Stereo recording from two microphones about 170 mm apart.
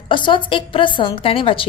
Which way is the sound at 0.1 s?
30° left (ahead or behind).